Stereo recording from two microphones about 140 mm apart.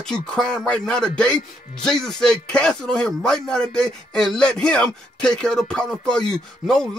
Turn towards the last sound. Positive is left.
turn(degrees=5)  # may be behind; listen again after turning